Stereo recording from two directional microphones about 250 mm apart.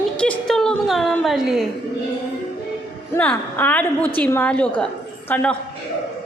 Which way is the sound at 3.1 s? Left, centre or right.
Centre.